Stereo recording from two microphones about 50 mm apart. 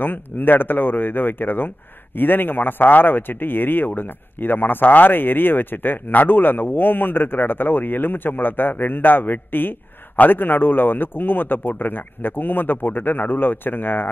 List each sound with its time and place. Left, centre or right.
0.0 s speech: left